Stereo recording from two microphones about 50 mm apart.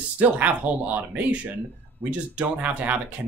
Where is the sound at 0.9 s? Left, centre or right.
Right.